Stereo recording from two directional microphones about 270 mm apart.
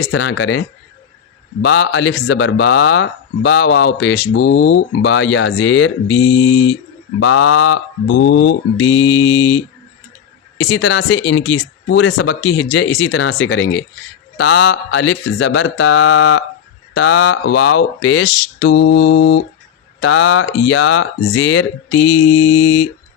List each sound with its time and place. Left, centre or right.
0.0 s speech: left
1.6 s speech: left
9.0 s mantra: centre
10.6 s speech: left
21.9 s mantra: centre